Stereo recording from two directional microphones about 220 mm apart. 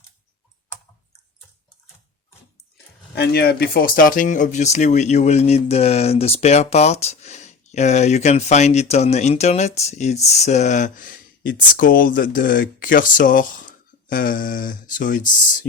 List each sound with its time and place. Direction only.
2.7 s speech: 50° left (ahead or behind)